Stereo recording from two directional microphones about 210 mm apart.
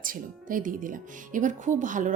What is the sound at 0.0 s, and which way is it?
Speech, 40° right (ahead or behind).